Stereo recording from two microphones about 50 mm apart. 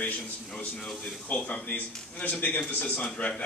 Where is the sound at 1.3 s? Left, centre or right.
Left.